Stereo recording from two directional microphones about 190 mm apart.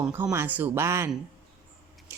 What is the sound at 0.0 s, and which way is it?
A woman's voice, 15° right (ahead or behind).